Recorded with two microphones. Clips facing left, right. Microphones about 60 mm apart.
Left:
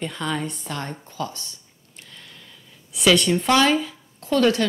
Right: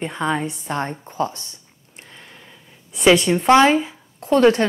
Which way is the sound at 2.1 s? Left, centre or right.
Right.